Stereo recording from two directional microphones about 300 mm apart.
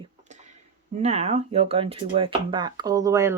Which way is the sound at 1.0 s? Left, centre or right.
Right.